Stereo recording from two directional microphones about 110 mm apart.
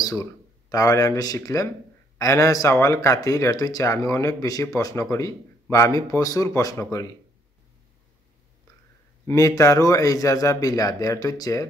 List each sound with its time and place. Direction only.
0.0 s speech: 30° left (ahead or behind)
9.3 s a man's voice: 30° left (ahead or behind)